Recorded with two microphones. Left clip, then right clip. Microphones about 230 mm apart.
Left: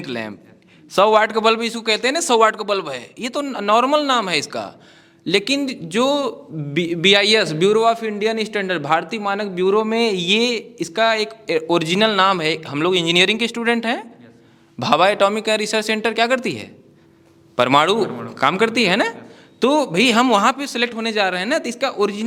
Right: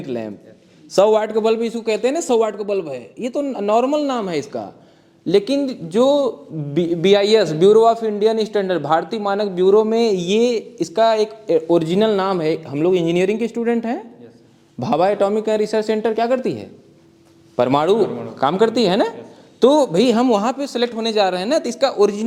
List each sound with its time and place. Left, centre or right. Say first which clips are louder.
0.0 s a man's voice: right 1 dB; left